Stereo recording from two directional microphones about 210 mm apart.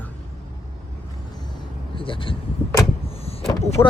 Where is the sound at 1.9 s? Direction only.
25° left (ahead or behind).